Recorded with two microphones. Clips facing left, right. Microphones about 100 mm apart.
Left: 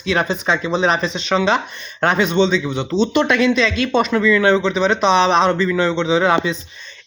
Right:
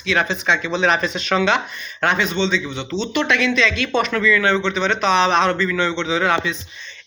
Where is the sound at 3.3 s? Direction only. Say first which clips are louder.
Left 3 dB; 35° left (ahead or behind).